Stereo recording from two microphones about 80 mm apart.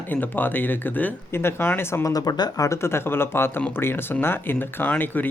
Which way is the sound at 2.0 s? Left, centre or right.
Left.